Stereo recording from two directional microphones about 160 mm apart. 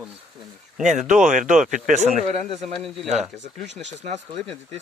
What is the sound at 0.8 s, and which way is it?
Speech, 50° right (ahead or behind).